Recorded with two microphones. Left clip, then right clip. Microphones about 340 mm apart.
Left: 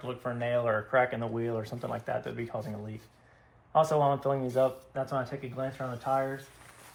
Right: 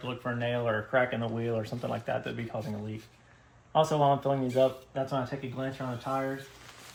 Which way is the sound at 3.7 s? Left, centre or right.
Centre.